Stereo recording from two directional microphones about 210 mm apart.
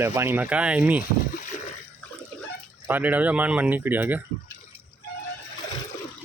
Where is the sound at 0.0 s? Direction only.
10° right (ahead or behind).